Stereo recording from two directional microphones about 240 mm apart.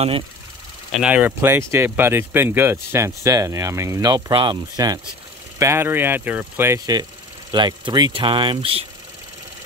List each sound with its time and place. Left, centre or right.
0.9 s speech: centre; by 8.8 s right